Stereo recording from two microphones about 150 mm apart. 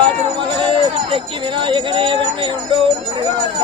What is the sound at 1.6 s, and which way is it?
Speech, 35° right (ahead or behind).